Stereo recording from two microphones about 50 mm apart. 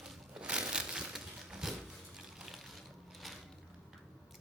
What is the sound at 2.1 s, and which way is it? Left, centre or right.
Music, centre.